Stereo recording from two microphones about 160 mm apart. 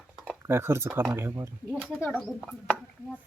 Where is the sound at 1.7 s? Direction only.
5° left (ahead or behind).